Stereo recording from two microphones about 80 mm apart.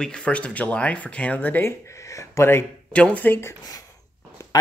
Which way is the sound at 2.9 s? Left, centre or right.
Centre.